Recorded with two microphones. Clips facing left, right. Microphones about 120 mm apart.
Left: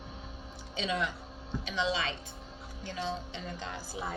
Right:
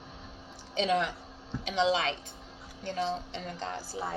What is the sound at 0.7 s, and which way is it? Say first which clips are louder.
A woman's voice: right 5 dB; 55° right (ahead or behind).